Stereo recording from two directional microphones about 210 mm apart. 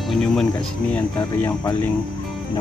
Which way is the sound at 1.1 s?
15° left (ahead or behind).